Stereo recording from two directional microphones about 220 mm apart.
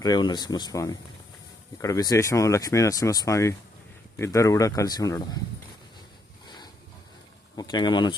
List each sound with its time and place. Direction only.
0.0 s speech: 20° left (ahead or behind)
6.4 s a sound: 20° left (ahead or behind)
7.5 s speech: 20° left (ahead or behind)